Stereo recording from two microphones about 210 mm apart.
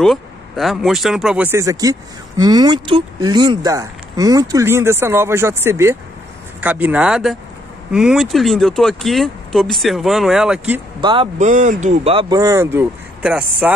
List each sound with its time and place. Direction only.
0.0 s speech: centre (ahead or behind)
11.0 s speech: 25° right (ahead or behind)
11.3 s speech: 35° right (ahead or behind); by 13.7 s 10° right (ahead or behind)